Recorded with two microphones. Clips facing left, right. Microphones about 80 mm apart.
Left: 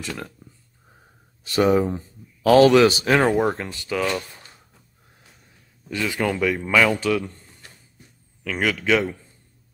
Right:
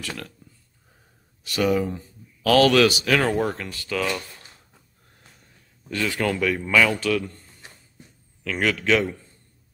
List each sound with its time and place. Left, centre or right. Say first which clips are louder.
0.4 s a sound: left 3 dB; left
1.4 s speech: left 4 dB; left
3.0 s speech: left 3 dB; left
3.3 s speech: left 3 dB; left
5.9 s speech: left 1 dB; centre
7.0 s speech: left 1 dB; centre
7.6 s a sound: right 1 dB; right
8.5 s speech: even; centre